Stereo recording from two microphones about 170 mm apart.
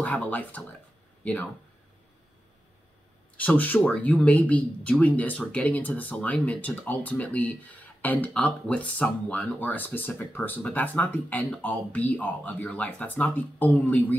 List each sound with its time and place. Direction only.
0.0 s speech: 10° left (ahead or behind)
3.3 s speech: 10° left (ahead or behind)